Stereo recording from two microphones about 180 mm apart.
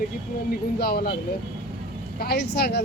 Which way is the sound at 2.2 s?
60° left (ahead or behind).